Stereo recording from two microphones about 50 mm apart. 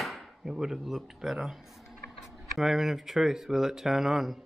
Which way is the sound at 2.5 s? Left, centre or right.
Centre.